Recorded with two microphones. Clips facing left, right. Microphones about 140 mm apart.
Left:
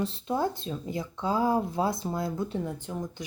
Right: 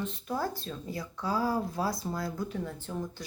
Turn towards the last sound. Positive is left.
turn(degrees=15)  # may be behind; listen again after turning